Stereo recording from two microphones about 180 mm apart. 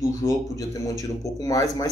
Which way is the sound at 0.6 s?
20° left (ahead or behind).